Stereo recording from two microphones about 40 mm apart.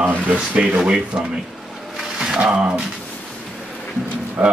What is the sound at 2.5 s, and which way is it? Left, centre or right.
Speech, right.